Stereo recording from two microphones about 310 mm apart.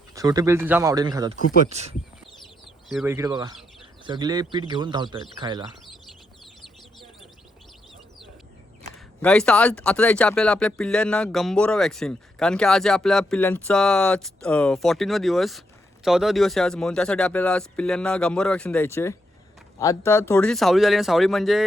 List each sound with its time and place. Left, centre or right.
0.1 s speech: centre
2.9 s speech: centre
9.2 s speech: centre